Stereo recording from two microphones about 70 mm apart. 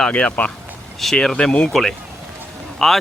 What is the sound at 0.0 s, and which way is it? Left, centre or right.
Speech, centre.